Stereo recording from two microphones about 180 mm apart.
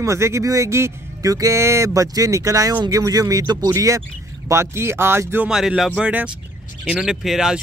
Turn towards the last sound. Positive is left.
turn(degrees=-5)  # may be behind; listen again after turning